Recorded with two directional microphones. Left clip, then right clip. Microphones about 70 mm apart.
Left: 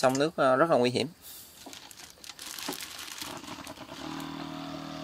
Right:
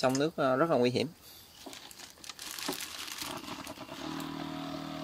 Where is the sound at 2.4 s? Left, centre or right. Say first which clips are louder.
Even; centre.